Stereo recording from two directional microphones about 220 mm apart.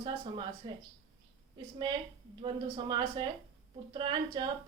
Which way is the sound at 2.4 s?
20° right (ahead or behind).